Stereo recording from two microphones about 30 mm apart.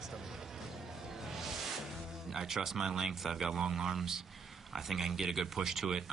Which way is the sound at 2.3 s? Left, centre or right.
Centre.